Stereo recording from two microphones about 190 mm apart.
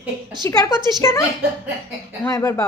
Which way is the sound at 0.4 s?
15° left (ahead or behind).